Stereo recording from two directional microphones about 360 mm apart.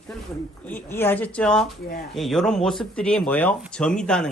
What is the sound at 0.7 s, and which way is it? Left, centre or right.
Speech, centre.